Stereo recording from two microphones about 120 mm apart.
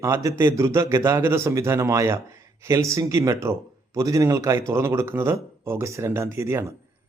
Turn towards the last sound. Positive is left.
turn(degrees=-20)  # may be behind; listen again after turning